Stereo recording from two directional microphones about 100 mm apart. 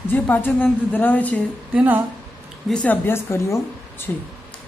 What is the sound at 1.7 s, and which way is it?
Speech, 15° right (ahead or behind).